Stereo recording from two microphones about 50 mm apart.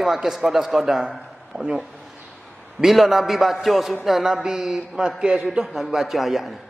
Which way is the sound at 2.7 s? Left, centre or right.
Centre.